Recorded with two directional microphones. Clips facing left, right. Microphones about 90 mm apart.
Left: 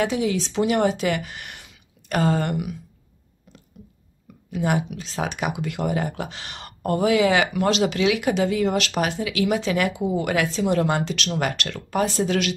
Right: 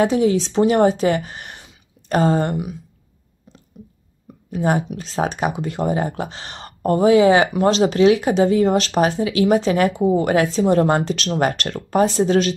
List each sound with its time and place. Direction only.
0.0 s speech: 35° right (ahead or behind)
3.5 s a sound: 30° right (ahead or behind)
4.5 s speech: 35° right (ahead or behind)